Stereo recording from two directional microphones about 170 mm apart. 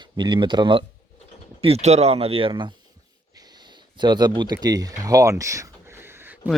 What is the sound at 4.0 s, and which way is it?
Speech, 25° right (ahead or behind).